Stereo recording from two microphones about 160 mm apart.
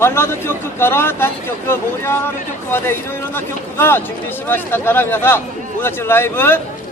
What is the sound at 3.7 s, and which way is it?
Speech, 15° left (ahead or behind).